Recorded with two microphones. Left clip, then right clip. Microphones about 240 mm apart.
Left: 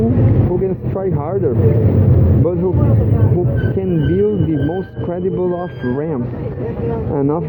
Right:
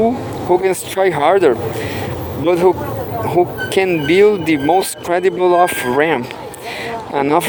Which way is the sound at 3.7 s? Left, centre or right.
Right.